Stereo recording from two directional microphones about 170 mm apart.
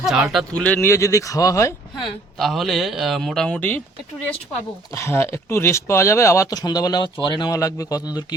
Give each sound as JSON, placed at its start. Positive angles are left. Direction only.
{"t": 0.0, "sound": "speech", "side_deg": 0}
{"t": 2.4, "sound": "speech", "side_deg": 0}
{"t": 4.9, "sound": "speech", "side_deg": 15}